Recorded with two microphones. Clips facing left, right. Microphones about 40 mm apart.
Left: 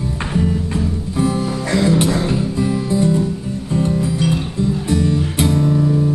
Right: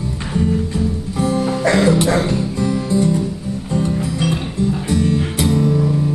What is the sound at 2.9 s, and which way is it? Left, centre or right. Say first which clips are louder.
Music: even; left.